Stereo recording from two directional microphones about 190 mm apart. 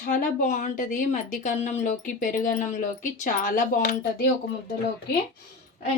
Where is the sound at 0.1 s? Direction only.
40° left (ahead or behind).